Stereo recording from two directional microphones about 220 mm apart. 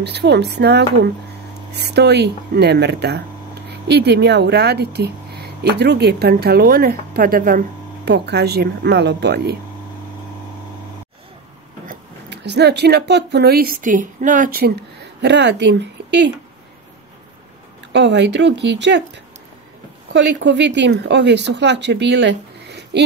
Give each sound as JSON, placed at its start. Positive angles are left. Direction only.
{"t": 0.0, "sound": "speech", "side_deg": -50}
{"t": 11.8, "sound": "speech", "side_deg": -45}
{"t": 15.2, "sound": "speech", "side_deg": -50}
{"t": 17.9, "sound": "speech", "side_deg": -50}
{"t": 20.1, "sound": "speech", "side_deg": -55}